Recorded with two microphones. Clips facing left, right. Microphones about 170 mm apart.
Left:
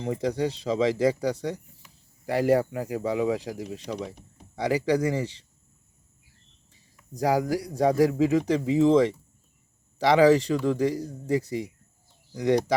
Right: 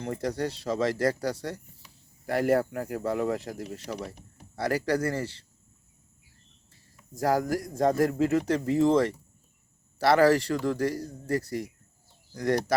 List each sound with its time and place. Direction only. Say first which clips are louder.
0.0 s speech: left 3 dB; 15° left (ahead or behind)
6.7 s a sound: left 3 dB; 15° left (ahead or behind)
7.7 s speech: left 3 dB; 15° left (ahead or behind)